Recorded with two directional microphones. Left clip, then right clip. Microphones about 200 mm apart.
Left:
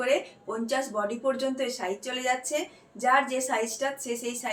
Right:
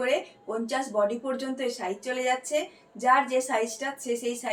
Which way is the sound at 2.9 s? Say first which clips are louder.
Right 2 dB; 15° left (ahead or behind).